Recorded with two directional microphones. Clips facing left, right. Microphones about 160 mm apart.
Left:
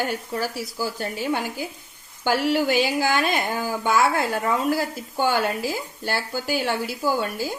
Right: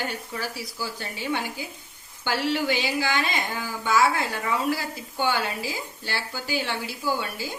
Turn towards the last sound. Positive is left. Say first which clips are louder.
# left 4 dB
turn(degrees=45)  # may be behind; listen again after turning